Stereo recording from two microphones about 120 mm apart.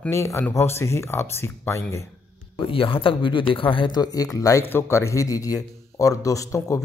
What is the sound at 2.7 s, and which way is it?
Speech, 45° left (ahead or behind).